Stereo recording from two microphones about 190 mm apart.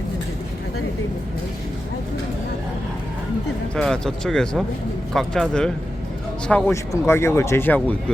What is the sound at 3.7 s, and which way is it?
Speech, 5° left (ahead or behind).